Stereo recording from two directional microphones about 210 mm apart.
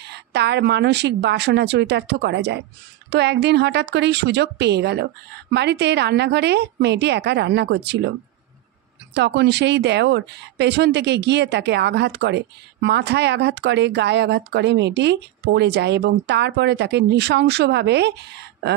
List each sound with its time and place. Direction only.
0.0 s speech: 50° right (ahead or behind)
9.1 s speech: 55° right (ahead or behind)